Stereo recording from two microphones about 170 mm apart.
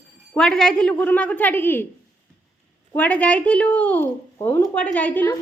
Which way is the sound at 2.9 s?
10° left (ahead or behind).